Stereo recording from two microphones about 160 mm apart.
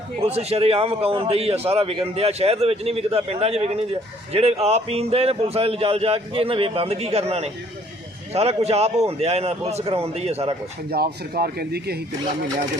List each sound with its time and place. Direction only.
0.2 s a man's voice: 40° right (ahead or behind)
10.9 s speech: 75° right (ahead or behind)